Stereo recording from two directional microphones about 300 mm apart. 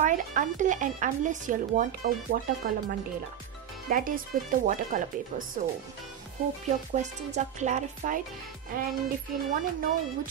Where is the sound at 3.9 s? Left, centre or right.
Right.